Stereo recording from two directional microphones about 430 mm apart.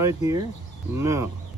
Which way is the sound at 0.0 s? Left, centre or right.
Centre.